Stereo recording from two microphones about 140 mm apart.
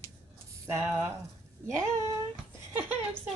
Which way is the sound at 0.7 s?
20° right (ahead or behind).